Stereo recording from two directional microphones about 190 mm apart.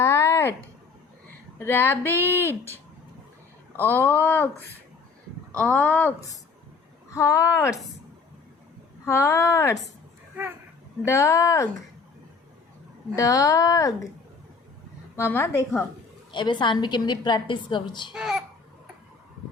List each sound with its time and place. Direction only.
0.0 s a sound: 15° left (ahead or behind)
1.5 s speech: 10° left (ahead or behind)
3.7 s speech: 10° left (ahead or behind)
5.5 s speech: 10° left (ahead or behind)
9.0 s speech: 15° left (ahead or behind)
11.0 s speech: 15° left (ahead or behind)
13.1 s speech: 20° left (ahead or behind)
15.1 s speech: 10° left (ahead or behind)
16.3 s a woman's voice: 25° left (ahead or behind)
18.1 s a child's voice: 5° right (ahead or behind)